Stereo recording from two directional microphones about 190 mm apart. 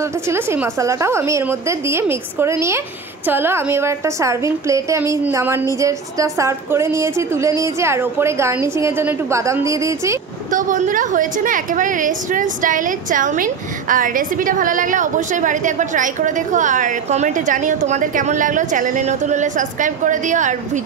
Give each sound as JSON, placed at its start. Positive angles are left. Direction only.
{"t": 0.3, "sound": "a woman's voice", "side_deg": -15}
{"t": 10.5, "sound": "a woman's voice", "side_deg": -45}